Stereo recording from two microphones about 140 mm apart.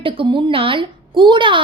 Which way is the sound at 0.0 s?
40° right (ahead or behind).